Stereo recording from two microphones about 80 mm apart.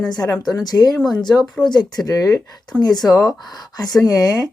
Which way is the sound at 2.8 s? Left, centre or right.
Left.